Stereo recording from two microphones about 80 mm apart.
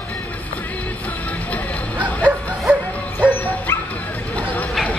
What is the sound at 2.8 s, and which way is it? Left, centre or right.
Bow-wow, centre.